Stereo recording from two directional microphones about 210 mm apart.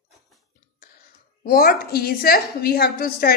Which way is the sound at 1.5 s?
45° left (ahead or behind).